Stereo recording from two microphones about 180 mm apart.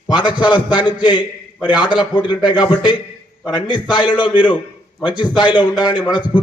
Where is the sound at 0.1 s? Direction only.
25° left (ahead or behind).